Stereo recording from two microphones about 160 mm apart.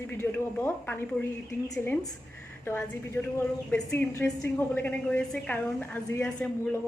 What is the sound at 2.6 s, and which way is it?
A woman's voice, 15° left (ahead or behind).